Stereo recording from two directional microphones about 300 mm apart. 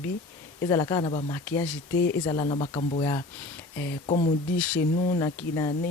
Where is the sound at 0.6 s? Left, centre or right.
Centre.